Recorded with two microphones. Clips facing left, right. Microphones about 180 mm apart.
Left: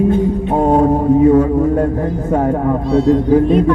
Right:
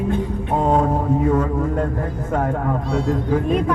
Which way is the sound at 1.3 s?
35° left (ahead or behind).